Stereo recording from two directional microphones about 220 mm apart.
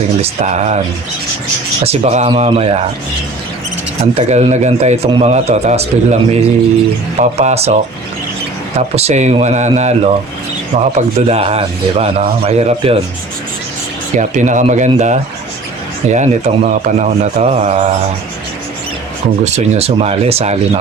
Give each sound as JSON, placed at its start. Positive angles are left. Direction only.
{"t": 0.2, "sound": "speech", "side_deg": -30}
{"t": 1.8, "sound": "a man's voice", "side_deg": -30}
{"t": 4.0, "sound": "a man's voice", "side_deg": -30}
{"t": 9.0, "sound": "a man's voice", "side_deg": -30}
{"t": 14.2, "sound": "speech", "side_deg": -35}
{"t": 19.5, "sound": "a man's voice", "side_deg": -30}